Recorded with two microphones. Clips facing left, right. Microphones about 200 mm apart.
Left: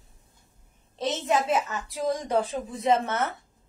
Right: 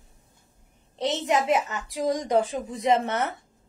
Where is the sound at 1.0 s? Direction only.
20° right (ahead or behind).